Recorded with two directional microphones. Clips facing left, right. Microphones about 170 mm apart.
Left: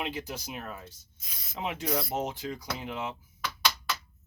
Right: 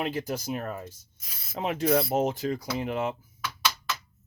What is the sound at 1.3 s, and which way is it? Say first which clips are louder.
Speech: right 1 dB; 5° right (ahead or behind).